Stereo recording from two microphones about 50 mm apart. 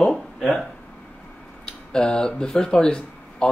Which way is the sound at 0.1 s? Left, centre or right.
Centre.